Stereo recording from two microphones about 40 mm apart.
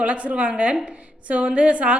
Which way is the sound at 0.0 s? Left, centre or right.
Right.